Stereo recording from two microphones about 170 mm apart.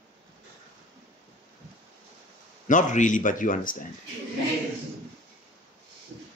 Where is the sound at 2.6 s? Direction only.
50° left (ahead or behind).